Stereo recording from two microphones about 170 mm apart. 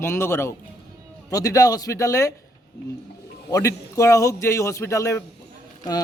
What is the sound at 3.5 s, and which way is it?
A man's voice, 15° left (ahead or behind).